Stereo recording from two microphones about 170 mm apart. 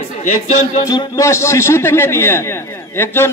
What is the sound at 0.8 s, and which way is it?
A man's voice, 20° left (ahead or behind).